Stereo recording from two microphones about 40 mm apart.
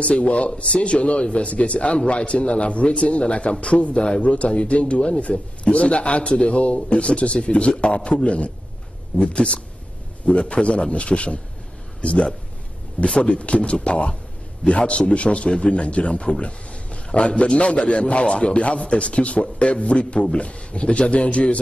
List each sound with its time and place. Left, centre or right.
0.0 s speech: left